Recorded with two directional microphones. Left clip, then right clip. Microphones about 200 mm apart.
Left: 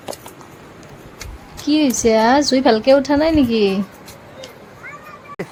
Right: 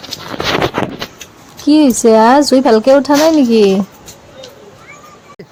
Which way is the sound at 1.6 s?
25° right (ahead or behind).